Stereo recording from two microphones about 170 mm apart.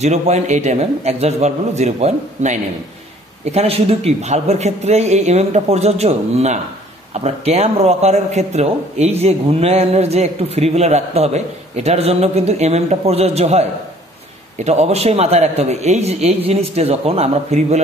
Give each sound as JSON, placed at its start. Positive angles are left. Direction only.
{"t": 0.0, "sound": "a man's voice", "side_deg": -40}